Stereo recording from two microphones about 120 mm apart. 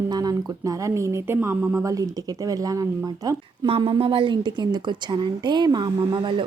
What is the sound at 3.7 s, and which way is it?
A woman's voice, 50° right (ahead or behind).